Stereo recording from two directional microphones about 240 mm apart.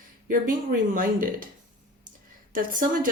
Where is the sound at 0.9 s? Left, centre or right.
Right.